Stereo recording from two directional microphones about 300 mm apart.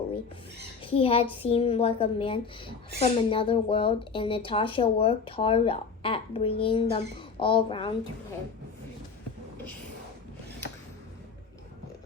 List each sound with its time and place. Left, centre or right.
0.8 s speech: centre